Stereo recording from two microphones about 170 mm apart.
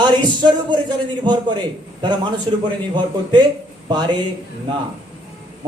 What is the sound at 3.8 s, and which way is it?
Speech, 25° right (ahead or behind).